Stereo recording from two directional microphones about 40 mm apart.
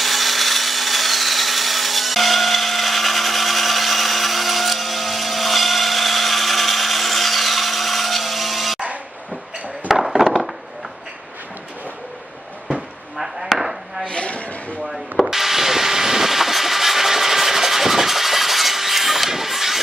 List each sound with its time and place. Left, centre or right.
0.0 s wood: centre
9.8 s chop: centre
13.6 s chopping: centre
14.0 s a sound: left
15.2 s vehicle: centre